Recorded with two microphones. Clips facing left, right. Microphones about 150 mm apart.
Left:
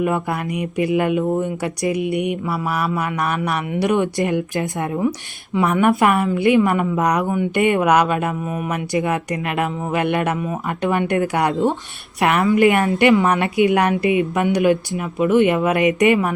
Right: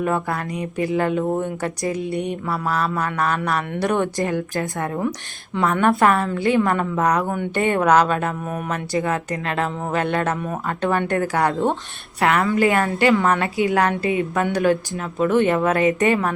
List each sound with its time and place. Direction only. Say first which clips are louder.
0.0 s mantra: left 2 dB; 15° left (ahead or behind)
8.4 s speech: left 2 dB; 5° left (ahead or behind)
8.7 s mantra: left 2 dB; 15° left (ahead or behind)
12.2 s a woman's voice: left 3 dB; 20° left (ahead or behind)
13.2 s mantra: left 3 dB; 20° left (ahead or behind)